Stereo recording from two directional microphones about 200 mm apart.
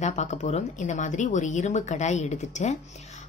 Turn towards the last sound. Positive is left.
turn(degrees=35)  # may be behind; listen again after turning